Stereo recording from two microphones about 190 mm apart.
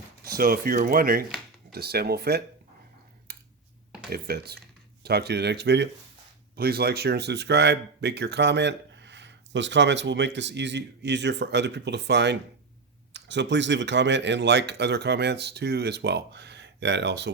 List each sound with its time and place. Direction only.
0.3 s speech: 50° right (ahead or behind)
3.3 s finger snapping: 55° right (ahead or behind)
4.1 s speech: 55° right (ahead or behind)
6.6 s speech: 55° right (ahead or behind)